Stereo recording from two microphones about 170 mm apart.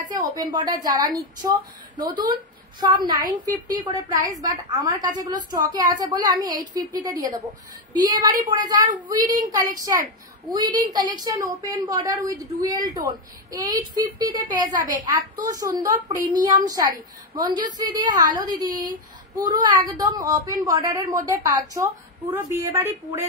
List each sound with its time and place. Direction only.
0.2 s a woman's voice: 20° right (ahead or behind)